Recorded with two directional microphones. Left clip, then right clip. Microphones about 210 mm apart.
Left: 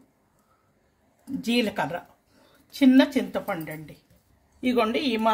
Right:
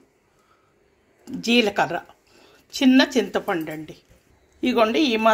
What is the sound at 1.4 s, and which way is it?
A woman's voice, 15° right (ahead or behind).